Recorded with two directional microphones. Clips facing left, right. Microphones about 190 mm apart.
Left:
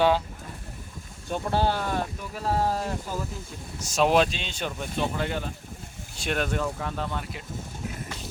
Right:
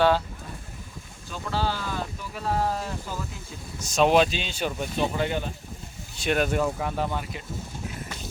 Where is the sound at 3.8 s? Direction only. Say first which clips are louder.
Right 2 dB; 5° left (ahead or behind).